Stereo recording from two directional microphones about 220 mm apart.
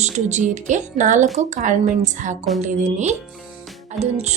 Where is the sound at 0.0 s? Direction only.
30° right (ahead or behind).